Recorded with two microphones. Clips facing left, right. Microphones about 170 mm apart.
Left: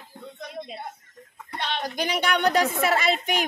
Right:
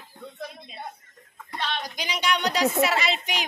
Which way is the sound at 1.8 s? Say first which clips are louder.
Left 4 dB; 55° left (ahead or behind).